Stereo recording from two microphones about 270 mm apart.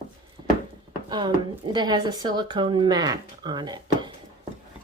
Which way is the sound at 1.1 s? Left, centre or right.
Centre.